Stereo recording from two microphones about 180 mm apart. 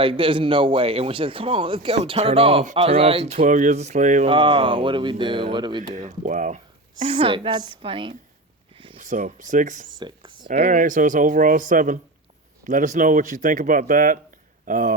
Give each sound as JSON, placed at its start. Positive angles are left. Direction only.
{"t": 0.0, "sound": "speech", "side_deg": -30}
{"t": 3.4, "sound": "speech", "side_deg": -45}
{"t": 4.3, "sound": "speech", "side_deg": -30}
{"t": 5.9, "sound": "speech", "side_deg": -40}
{"t": 7.0, "sound": "speech", "side_deg": -30}
{"t": 9.0, "sound": "a sound", "side_deg": -45}
{"t": 9.5, "sound": "speech", "side_deg": -45}
{"t": 10.0, "sound": "speech", "side_deg": -25}